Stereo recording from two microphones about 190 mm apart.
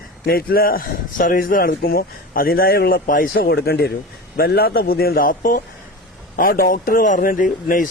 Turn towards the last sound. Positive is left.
turn(degrees=45)  # may be behind; listen again after turning